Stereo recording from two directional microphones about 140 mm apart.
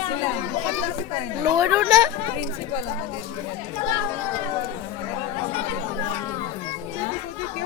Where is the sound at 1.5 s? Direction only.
25° right (ahead or behind).